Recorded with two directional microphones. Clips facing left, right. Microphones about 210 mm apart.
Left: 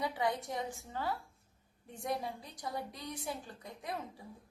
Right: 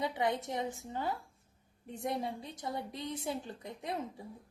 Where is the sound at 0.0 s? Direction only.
20° right (ahead or behind).